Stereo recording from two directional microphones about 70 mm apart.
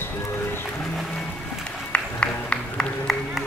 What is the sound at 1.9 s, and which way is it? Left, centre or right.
Music, centre.